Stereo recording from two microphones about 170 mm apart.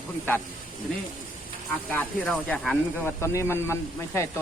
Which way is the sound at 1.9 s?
5° left (ahead or behind).